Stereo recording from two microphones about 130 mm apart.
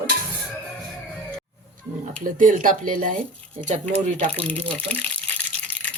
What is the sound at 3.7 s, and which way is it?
Speech, 70° right (ahead or behind).